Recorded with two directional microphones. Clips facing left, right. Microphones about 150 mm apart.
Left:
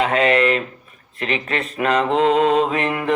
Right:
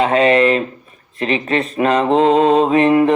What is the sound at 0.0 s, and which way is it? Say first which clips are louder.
Speech: right 4 dB; 30° right (ahead or behind).